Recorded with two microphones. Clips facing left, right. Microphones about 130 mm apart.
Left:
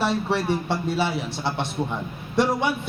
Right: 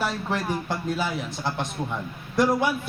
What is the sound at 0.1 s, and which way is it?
Speech, centre (ahead or behind).